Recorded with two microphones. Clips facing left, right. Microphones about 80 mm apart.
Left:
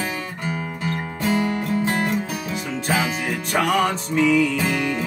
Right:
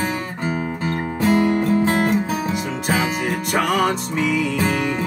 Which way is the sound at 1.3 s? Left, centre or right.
Right.